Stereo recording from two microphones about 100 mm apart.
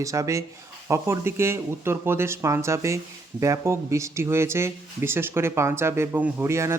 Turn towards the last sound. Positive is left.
turn(degrees=-25)  # may be behind; listen again after turning